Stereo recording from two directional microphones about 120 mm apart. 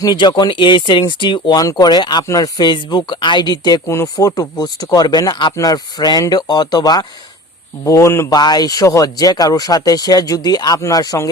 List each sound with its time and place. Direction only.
0.0 s speech: 40° left (ahead or behind)